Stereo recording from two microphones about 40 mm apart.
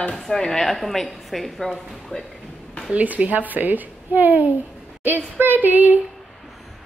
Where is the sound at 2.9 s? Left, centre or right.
Right.